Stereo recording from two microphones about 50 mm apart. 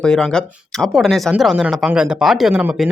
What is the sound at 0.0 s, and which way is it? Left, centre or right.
Speech, centre.